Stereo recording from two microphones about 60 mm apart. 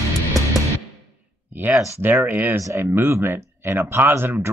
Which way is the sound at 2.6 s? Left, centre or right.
Right.